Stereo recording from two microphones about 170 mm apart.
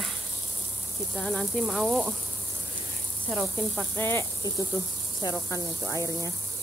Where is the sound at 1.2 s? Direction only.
5° left (ahead or behind).